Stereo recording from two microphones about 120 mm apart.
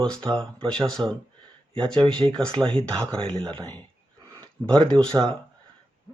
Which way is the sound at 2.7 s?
10° left (ahead or behind).